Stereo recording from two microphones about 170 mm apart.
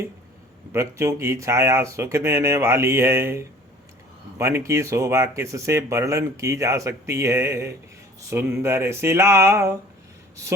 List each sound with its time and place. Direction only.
0.7 s speech: 15° right (ahead or behind)